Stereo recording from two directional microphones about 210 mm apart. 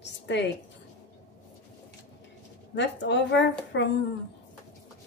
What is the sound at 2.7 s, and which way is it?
Speech, 55° left (ahead or behind).